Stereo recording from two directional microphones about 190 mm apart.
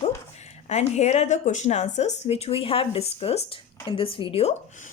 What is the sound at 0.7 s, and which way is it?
Speech, 35° left (ahead or behind).